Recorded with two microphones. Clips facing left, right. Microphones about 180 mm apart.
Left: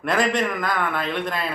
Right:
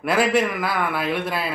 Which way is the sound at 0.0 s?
5° right (ahead or behind).